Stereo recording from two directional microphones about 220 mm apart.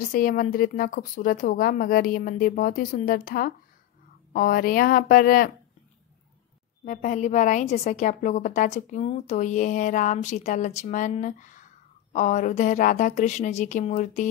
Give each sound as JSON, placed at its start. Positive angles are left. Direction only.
{"t": 0.1, "sound": "a woman's voice", "side_deg": 40}
{"t": 6.8, "sound": "a woman's voice", "side_deg": 35}